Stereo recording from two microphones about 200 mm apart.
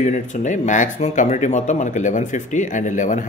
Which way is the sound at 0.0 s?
35° left (ahead or behind).